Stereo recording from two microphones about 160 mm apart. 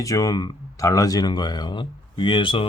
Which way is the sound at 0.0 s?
20° left (ahead or behind).